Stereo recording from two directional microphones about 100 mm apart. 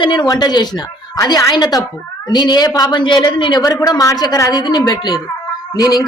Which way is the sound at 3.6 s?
35° left (ahead or behind).